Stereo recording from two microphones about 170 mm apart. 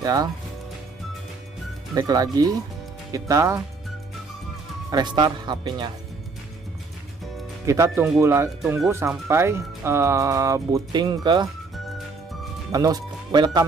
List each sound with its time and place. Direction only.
0.0 s speech: 20° right (ahead or behind)
2.0 s speech: 20° right (ahead or behind)
4.9 s speech: 25° right (ahead or behind)
7.6 s speech: 20° right (ahead or behind)
12.7 s speech: 20° right (ahead or behind)